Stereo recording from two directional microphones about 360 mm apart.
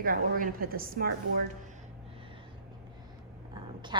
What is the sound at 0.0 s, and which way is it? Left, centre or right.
A woman's voice, right.